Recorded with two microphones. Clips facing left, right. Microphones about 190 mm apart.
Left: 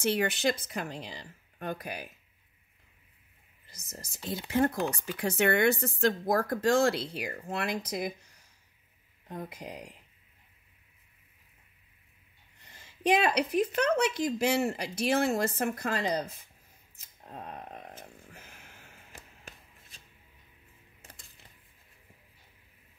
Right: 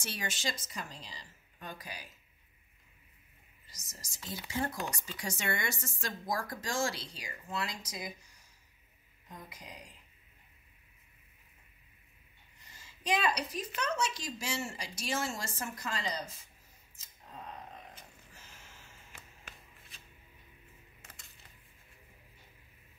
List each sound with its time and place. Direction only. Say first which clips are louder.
0.0 s speech: left 12 dB; 60° left (ahead or behind)
3.6 s speech: left 9 dB; 60° left (ahead or behind)
9.3 s speech: left 10 dB; 60° left (ahead or behind)
12.5 s a sound: left 5 dB; 60° left (ahead or behind)
13.7 s speech: left 4 dB; 60° left (ahead or behind)
18.3 s a sound: left 4 dB; 60° left (ahead or behind)
21.0 s typewriter: left 4 dB; 30° left (ahead or behind)